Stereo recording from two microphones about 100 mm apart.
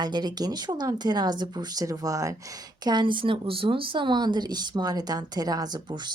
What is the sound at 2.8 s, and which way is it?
Speech, 50° right (ahead or behind).